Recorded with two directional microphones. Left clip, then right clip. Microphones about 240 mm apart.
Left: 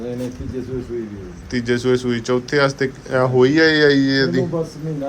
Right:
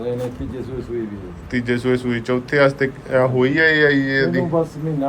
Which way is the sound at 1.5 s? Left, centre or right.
Centre.